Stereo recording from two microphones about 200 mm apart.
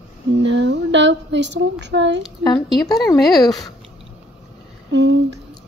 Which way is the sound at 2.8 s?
20° left (ahead or behind).